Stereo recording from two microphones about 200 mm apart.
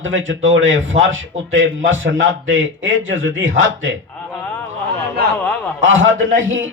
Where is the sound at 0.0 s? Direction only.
70° right (ahead or behind).